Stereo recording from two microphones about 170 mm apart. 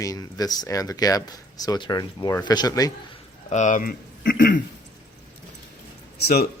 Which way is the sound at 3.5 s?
45° left (ahead or behind).